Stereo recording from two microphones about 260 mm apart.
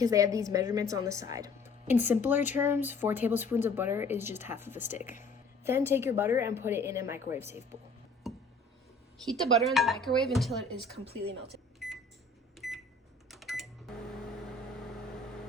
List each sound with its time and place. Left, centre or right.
0.0 s speech: centre
8.2 s a sound: centre
9.2 s speech: centre
10.9 s a woman's voice: right
12.5 s microwave oven: centre